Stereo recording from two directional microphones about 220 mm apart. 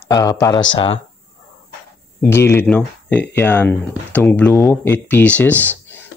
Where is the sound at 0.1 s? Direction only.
15° left (ahead or behind).